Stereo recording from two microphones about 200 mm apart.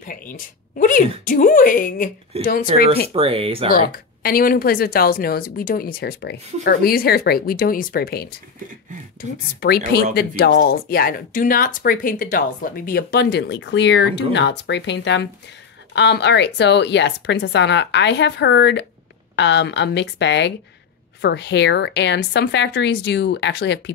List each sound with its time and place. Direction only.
0.0 s speech: 45° left (ahead or behind)
2.3 s speech: 30° right (ahead or behind)
3.7 s speech: 50° left (ahead or behind)
9.6 s a woman's voice: 55° left (ahead or behind)